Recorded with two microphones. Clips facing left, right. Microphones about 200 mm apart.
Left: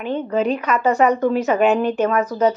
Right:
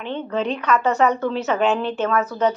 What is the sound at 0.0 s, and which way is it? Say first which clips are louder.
Speech: left 4 dB; 10° left (ahead or behind).